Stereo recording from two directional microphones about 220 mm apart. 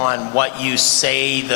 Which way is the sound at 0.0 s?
15° left (ahead or behind).